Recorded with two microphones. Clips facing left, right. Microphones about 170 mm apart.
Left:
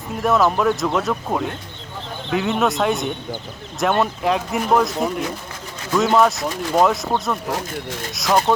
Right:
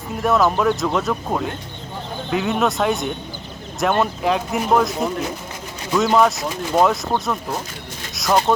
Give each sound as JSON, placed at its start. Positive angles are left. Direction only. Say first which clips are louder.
{"t": 0.2, "sound": "speech", "louder": "even", "side_deg": 0}